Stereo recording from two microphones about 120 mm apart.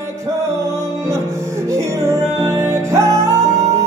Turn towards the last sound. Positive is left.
turn(degrees=-25)  # may be behind; listen again after turning